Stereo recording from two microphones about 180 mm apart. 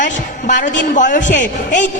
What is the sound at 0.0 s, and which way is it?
A woman's voice, 45° left (ahead or behind).